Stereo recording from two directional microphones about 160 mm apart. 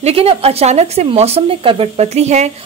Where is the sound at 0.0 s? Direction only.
40° right (ahead or behind).